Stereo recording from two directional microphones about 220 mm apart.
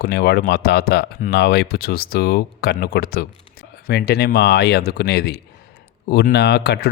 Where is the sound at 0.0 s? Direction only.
45° left (ahead or behind).